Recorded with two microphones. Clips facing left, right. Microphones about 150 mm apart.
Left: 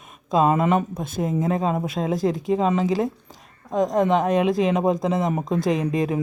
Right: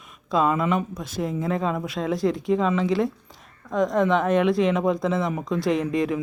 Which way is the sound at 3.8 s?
40° left (ahead or behind).